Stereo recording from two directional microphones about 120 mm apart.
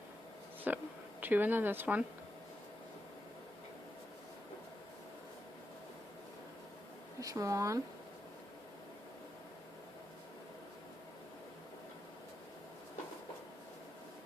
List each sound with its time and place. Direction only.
0.7 s speech: 15° right (ahead or behind)
7.2 s speech: 30° right (ahead or behind)